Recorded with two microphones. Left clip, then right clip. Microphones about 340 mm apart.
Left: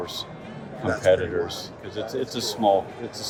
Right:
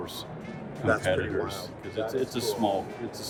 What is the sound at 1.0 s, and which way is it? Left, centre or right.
Speech, centre.